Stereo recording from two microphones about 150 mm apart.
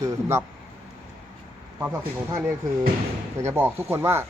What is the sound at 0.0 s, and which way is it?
Speech, 20° right (ahead or behind).